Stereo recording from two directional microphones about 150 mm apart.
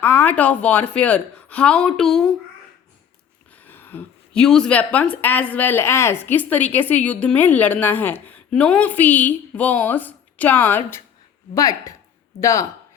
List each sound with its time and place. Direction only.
0.0 s a woman's voice: 10° left (ahead or behind)
3.5 s a woman's voice: 10° left (ahead or behind)